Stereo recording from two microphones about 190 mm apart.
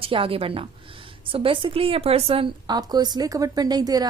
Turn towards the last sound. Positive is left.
turn(degrees=-20)  # may be behind; listen again after turning